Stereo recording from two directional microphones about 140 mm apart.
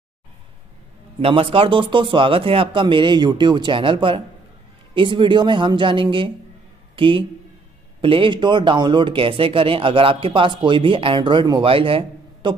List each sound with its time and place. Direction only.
1.2 s speech: 40° right (ahead or behind)